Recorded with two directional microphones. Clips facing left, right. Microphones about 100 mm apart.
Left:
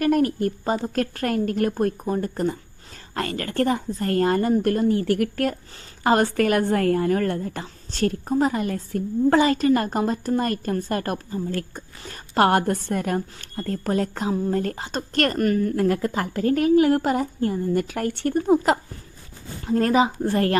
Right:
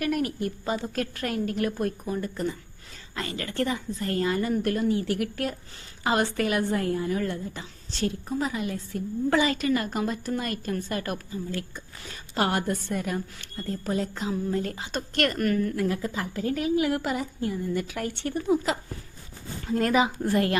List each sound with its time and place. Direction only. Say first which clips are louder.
0.0 s a woman's voice: left 7 dB; 40° left (ahead or behind)
13.7 s a woman's voice: left 5 dB; 55° left (ahead or behind)
19.6 s speech: left 4 dB; 35° left (ahead or behind)